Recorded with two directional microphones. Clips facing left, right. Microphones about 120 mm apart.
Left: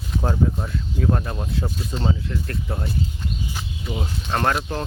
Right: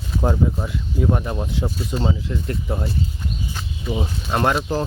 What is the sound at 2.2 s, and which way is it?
Speech, 20° right (ahead or behind).